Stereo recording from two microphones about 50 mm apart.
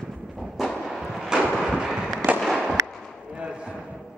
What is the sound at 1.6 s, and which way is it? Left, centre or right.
Fireworks, centre.